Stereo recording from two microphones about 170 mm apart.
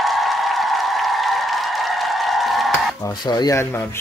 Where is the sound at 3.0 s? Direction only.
25° left (ahead or behind).